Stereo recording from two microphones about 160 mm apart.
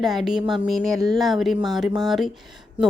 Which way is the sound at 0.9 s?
20° right (ahead or behind).